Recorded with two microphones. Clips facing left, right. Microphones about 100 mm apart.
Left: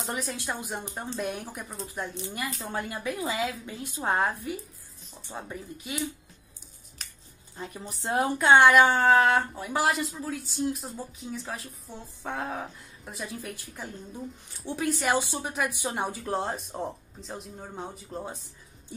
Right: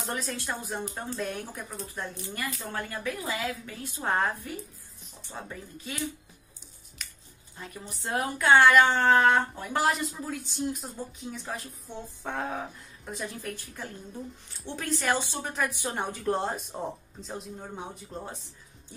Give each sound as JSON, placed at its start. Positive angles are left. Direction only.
{"t": 0.0, "sound": "a woman's voice", "side_deg": 15}
{"t": 7.0, "sound": "finger snapping", "side_deg": 35}
{"t": 7.5, "sound": "a woman's voice", "side_deg": 25}
{"t": 16.0, "sound": "speech", "side_deg": 5}